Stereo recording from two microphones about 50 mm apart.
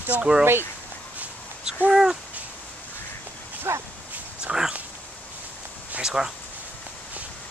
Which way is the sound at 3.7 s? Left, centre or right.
Right.